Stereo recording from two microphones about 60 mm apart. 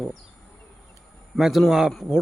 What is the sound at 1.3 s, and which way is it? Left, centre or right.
Speech, centre.